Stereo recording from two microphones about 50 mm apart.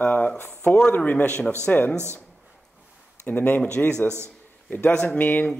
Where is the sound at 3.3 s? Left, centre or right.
Left.